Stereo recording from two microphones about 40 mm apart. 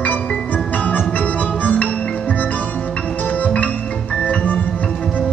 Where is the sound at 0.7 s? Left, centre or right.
Left.